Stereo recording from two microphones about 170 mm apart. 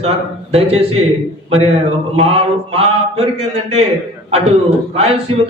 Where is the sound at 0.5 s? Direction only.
35° right (ahead or behind).